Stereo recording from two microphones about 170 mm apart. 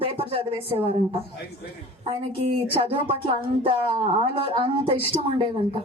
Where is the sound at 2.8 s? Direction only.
35° right (ahead or behind).